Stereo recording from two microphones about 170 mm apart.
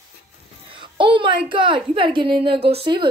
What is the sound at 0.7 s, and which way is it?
A woman's voice, 30° right (ahead or behind).